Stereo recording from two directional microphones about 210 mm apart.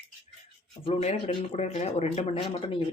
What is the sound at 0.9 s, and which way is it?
Speech, 30° left (ahead or behind).